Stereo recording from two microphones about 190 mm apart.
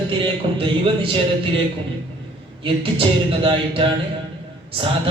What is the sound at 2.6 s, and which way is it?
A man's voice, 25° right (ahead or behind).